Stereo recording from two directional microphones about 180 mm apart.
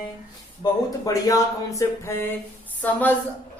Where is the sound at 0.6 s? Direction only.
25° left (ahead or behind).